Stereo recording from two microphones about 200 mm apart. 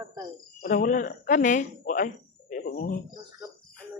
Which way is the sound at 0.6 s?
40° left (ahead or behind).